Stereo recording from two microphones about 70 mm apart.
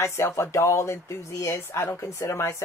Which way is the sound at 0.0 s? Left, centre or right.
Left.